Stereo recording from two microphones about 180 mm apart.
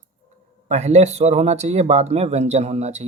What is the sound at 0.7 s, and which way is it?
Speech, 40° right (ahead or behind).